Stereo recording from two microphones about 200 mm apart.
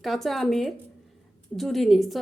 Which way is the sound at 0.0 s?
Centre (ahead or behind).